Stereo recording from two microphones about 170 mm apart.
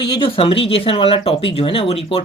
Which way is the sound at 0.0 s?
30° left (ahead or behind).